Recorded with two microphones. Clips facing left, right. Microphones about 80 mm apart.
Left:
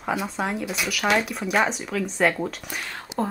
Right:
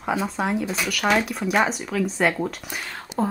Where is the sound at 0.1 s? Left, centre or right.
Centre.